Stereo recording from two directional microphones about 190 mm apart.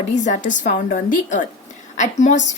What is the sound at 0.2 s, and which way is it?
A woman's voice, 40° left (ahead or behind).